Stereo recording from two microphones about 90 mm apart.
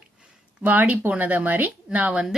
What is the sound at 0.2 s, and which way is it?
Speech, 20° right (ahead or behind).